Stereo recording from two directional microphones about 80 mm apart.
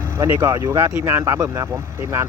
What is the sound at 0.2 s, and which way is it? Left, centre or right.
Speech, right.